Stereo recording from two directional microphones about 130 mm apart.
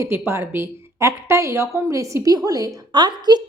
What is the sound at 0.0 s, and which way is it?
A woman's voice, 20° right (ahead or behind).